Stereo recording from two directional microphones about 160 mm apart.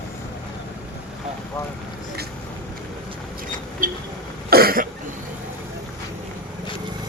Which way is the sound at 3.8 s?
55° right (ahead or behind).